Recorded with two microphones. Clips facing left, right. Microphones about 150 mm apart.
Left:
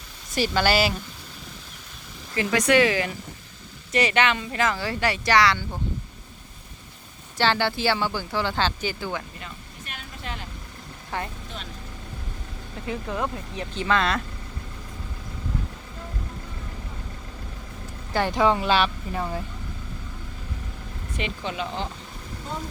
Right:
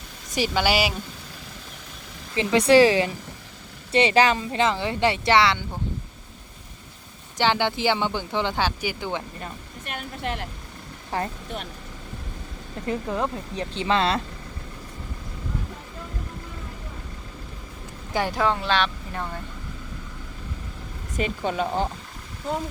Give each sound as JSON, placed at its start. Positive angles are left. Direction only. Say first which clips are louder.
{"t": 0.3, "sound": "speech", "louder": "left 1 dB", "side_deg": -15}
{"t": 2.3, "sound": "speech", "louder": "right 4 dB", "side_deg": -25}
{"t": 7.3, "sound": "speech", "louder": "right 1 dB", "side_deg": -15}
{"t": 9.4, "sound": "speech", "louder": "right 4 dB", "side_deg": -55}
{"t": 11.1, "sound": "speech", "louder": "right 3 dB", "side_deg": -35}
{"t": 13.1, "sound": "speech", "louder": "right 2 dB", "side_deg": -25}
{"t": 18.1, "sound": "speech", "louder": "left 1 dB", "side_deg": -10}
{"t": 18.3, "sound": "speech", "louder": "left 3 dB", "side_deg": 5}
{"t": 21.2, "sound": "speech", "louder": "right 5 dB", "side_deg": -45}